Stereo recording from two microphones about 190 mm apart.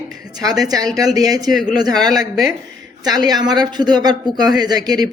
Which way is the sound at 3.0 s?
20° right (ahead or behind).